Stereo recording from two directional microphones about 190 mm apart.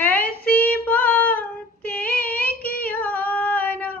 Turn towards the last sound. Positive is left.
turn(degrees=10)  # may be behind; listen again after turning